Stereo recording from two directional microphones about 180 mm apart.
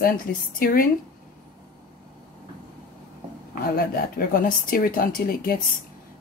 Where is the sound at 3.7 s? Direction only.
55° left (ahead or behind).